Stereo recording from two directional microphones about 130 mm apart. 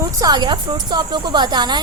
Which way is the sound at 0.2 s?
30° right (ahead or behind).